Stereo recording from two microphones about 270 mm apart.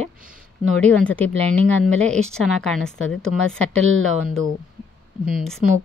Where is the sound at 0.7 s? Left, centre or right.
Centre.